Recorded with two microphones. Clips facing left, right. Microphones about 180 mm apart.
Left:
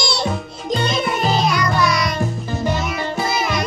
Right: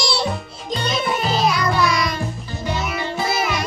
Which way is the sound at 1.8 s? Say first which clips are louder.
Left 2 dB; 45° left (ahead or behind).